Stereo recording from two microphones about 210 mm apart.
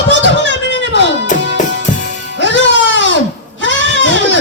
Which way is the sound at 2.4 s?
60° left (ahead or behind).